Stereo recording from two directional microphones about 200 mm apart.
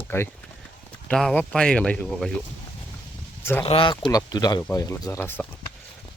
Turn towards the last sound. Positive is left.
turn(degrees=10)  # may be behind; listen again after turning